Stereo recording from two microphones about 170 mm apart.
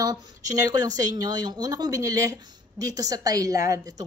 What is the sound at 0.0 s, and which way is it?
A woman's voice, 20° right (ahead or behind).